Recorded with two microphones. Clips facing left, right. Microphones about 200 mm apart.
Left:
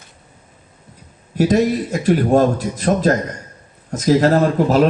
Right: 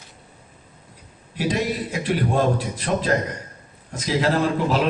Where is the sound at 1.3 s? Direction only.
45° left (ahead or behind).